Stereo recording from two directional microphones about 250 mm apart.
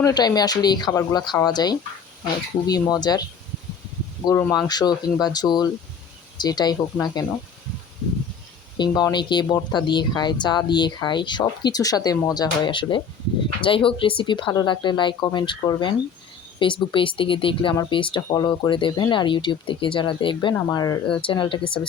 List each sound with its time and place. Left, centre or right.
0.0 s speech: centre
4.3 s speech: centre
8.8 s speech: centre